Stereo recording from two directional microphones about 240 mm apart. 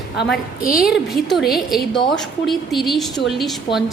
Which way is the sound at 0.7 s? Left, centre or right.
Centre.